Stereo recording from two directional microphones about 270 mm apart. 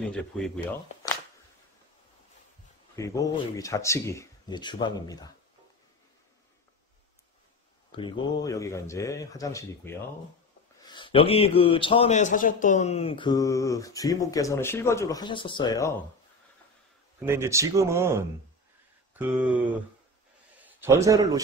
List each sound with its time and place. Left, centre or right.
0.0 s a sound: centre
3.0 s a man's voice: centre
7.9 s a man's voice: centre
17.2 s speech: centre
19.1 s a sound: centre
20.6 s a man's voice: centre